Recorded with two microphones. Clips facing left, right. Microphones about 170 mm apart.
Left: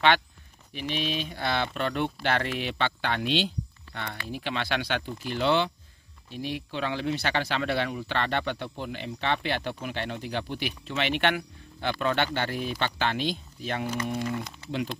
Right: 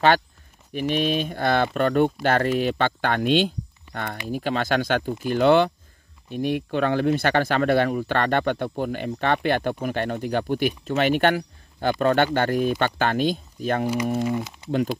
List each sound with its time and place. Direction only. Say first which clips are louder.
0.7 s speech: right 8 dB; 50° right (ahead or behind)